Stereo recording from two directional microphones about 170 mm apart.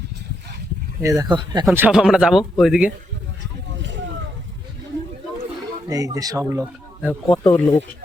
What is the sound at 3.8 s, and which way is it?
Vehicle, 90° right.